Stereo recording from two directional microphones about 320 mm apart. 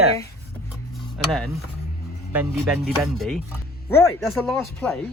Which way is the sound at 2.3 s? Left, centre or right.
Centre.